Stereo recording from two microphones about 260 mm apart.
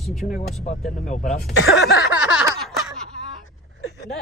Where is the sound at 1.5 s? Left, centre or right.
Left.